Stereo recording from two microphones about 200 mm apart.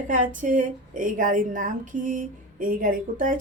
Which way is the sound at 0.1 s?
40° right (ahead or behind).